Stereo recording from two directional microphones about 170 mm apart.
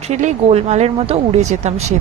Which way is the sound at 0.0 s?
40° right (ahead or behind).